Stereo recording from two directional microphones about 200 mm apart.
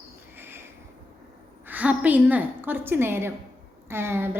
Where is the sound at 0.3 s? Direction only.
10° right (ahead or behind).